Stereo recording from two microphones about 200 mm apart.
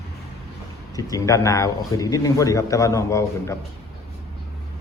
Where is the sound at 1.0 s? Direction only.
15° left (ahead or behind).